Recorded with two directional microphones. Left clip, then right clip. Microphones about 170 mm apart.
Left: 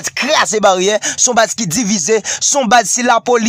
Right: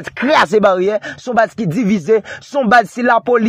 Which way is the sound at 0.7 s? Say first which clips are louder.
Left 3 dB; 20° left (ahead or behind).